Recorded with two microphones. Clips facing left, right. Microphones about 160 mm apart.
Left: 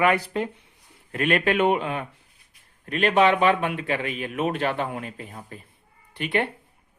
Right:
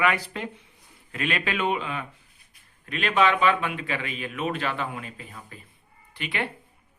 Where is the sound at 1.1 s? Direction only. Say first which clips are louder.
Left 6 dB; 50° left (ahead or behind).